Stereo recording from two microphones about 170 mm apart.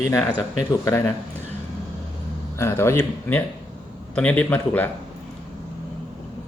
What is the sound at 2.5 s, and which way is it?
Speech, 15° left (ahead or behind).